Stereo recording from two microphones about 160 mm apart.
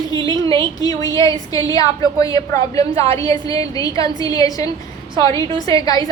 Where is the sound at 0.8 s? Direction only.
20° left (ahead or behind).